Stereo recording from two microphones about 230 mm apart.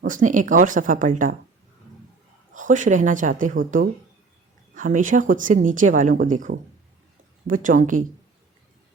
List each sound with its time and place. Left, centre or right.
0.0 s speech: right
2.5 s speech: right